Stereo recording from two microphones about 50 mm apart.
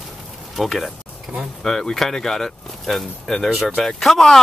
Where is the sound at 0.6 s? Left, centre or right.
Centre.